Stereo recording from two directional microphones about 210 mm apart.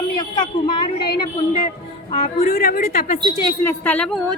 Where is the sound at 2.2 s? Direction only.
40° left (ahead or behind).